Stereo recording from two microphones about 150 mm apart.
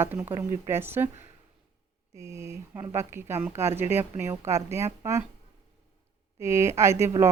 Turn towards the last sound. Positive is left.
turn(degrees=-20)  # may be behind; listen again after turning